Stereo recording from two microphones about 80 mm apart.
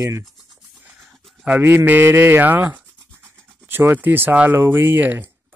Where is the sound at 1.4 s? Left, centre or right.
Right.